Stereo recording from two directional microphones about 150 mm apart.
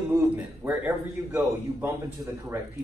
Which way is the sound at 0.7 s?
10° right (ahead or behind).